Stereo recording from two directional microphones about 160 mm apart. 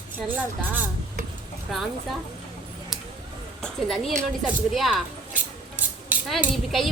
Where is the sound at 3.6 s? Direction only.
Centre (ahead or behind).